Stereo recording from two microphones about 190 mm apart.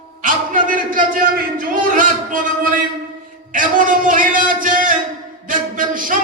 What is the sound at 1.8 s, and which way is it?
A man's voice, 45° right (ahead or behind).